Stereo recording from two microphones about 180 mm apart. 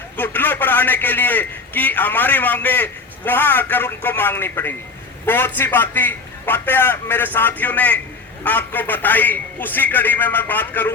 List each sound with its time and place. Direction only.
0.2 s a man's voice: 10° left (ahead or behind)